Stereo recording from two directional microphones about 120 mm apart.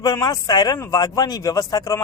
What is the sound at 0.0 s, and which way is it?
Speech, 30° left (ahead or behind).